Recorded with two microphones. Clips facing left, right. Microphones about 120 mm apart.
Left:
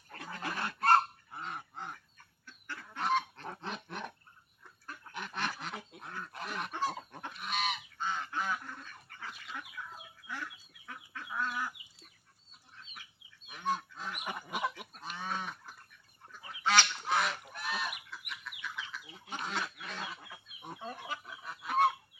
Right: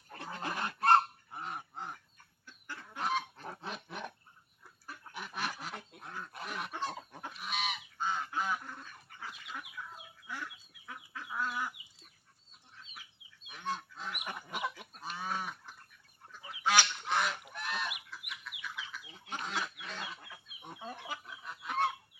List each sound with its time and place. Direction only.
0.1 s goose: 20° right (ahead or behind)
3.0 s goose: centre (ahead or behind)
7.9 s goose: 10° right (ahead or behind)
9.3 s chicken: 5° right (ahead or behind)
13.5 s goose: 5° left (ahead or behind)
14.9 s goose: 5° right (ahead or behind)
18.1 s chicken: 5° right (ahead or behind)
21.1 s goose: centre (ahead or behind)